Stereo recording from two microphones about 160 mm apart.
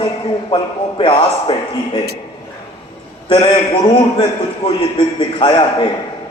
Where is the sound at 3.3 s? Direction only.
30° left (ahead or behind).